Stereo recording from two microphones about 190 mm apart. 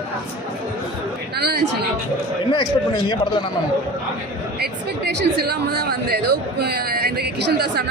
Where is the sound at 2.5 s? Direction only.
25° left (ahead or behind).